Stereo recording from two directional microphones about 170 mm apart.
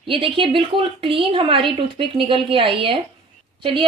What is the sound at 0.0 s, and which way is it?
A woman's voice, 30° right (ahead or behind).